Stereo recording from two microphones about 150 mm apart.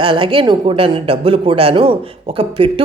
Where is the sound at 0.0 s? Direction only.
35° right (ahead or behind).